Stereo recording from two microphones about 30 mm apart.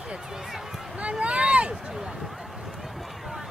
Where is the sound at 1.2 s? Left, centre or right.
Right.